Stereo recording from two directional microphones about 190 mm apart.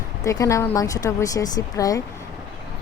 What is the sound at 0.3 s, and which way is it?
Speech, 15° left (ahead or behind).